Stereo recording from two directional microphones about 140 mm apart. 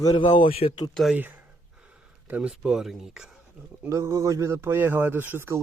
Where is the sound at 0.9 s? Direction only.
Centre (ahead or behind).